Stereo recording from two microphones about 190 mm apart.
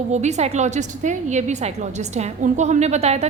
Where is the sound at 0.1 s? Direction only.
35° right (ahead or behind).